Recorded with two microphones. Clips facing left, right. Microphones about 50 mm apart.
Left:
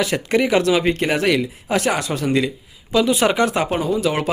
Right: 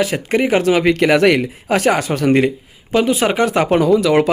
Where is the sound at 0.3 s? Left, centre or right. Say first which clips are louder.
Right 2 dB; right.